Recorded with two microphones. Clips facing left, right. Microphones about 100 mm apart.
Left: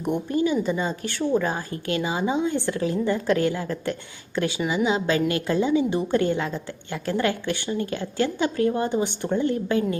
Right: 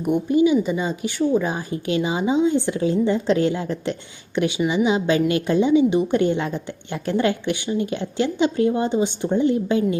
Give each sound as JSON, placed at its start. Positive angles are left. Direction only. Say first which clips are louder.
{"t": 0.0, "sound": "a woman's voice", "louder": "right 6 dB", "side_deg": -10}